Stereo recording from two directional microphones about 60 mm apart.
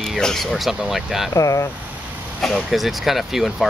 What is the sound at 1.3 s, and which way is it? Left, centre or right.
Speech, left.